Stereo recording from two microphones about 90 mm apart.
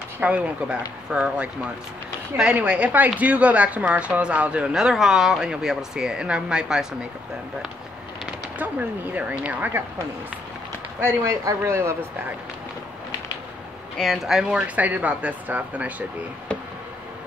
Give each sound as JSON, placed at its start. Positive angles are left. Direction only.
{"t": 0.2, "sound": "speech", "side_deg": -15}
{"t": 8.5, "sound": "speech", "side_deg": -15}
{"t": 11.0, "sound": "speech", "side_deg": -25}
{"t": 13.9, "sound": "speech", "side_deg": 0}
{"t": 14.8, "sound": "speech", "side_deg": -15}